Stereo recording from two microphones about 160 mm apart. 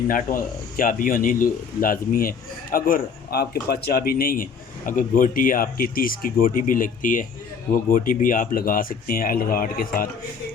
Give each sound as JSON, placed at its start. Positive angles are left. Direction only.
{"t": 0.1, "sound": "speech", "side_deg": 60}